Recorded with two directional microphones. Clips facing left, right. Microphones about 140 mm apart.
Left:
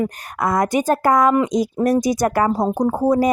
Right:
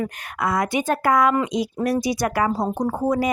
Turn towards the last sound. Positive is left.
turn(degrees=40)  # may be behind; listen again after turning